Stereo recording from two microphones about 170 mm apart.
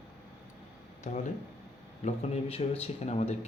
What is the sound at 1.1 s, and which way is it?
A man's voice, 45° left (ahead or behind).